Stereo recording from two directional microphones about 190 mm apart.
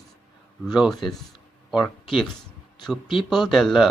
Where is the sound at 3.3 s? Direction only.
Centre (ahead or behind).